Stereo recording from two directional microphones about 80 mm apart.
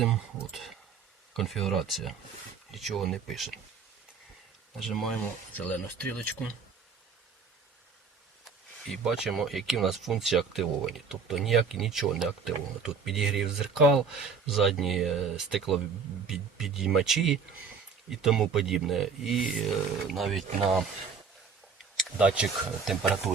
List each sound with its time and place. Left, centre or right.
0.0 s speech: centre
4.8 s speech: centre
5.5 s speech: centre
8.4 s speech: centre
22.2 s speech: centre